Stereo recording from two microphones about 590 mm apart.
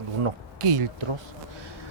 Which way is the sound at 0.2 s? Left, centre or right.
Right.